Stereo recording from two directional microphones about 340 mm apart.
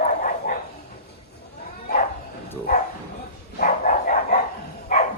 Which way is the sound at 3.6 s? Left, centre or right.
Left.